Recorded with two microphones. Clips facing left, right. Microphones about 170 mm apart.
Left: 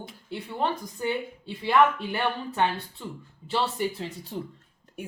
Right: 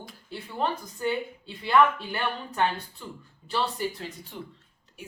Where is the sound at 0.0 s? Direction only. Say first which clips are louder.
Left 3 dB; 25° left (ahead or behind).